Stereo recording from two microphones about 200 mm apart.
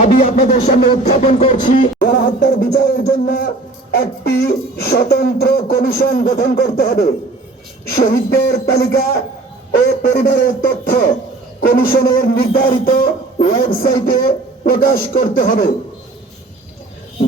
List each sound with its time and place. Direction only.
0.0 s a sound: 40° left (ahead or behind)
1.2 s speech: 30° left (ahead or behind)
2.0 s speech: 50° left (ahead or behind)